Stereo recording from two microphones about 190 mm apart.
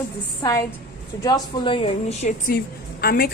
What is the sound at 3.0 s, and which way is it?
Speech, 50° left (ahead or behind).